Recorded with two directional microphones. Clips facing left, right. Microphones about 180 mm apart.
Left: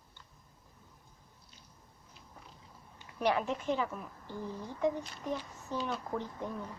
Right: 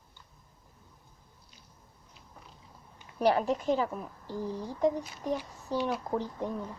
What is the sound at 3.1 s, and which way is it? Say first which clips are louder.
A woman's voice: right 5 dB; 35° right (ahead or behind).